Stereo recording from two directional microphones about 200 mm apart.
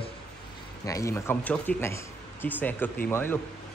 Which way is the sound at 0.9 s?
15° left (ahead or behind).